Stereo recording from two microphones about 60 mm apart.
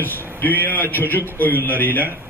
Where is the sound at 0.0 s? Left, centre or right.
Left.